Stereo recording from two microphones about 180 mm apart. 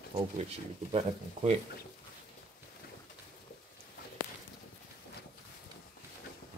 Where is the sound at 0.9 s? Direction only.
35° right (ahead or behind).